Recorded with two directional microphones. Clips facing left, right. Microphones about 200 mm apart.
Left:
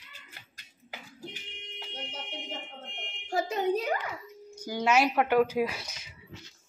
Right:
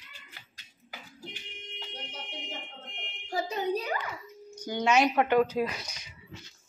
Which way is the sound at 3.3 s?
50° left (ahead or behind).